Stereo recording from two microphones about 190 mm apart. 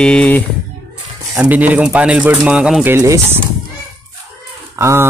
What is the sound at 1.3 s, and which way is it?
Speech, 10° right (ahead or behind).